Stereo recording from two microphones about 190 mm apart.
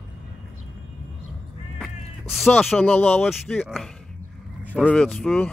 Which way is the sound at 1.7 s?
Centre (ahead or behind).